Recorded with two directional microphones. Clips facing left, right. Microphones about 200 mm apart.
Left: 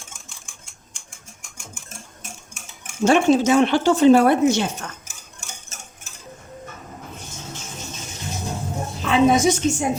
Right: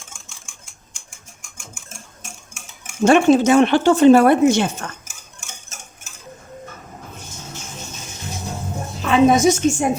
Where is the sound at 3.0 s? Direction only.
55° right (ahead or behind).